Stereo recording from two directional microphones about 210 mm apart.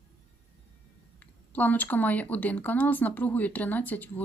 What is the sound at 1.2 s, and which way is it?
Speech, 10° left (ahead or behind).